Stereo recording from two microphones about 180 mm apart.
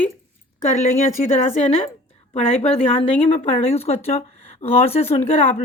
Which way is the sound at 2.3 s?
35° left (ahead or behind).